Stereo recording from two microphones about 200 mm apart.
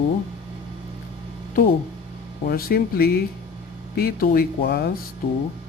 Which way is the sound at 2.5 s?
50° left (ahead or behind).